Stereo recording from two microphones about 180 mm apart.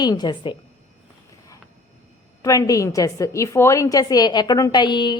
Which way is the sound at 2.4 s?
15° left (ahead or behind).